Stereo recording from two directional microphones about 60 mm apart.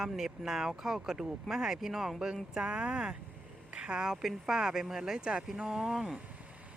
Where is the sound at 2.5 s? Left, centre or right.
Centre.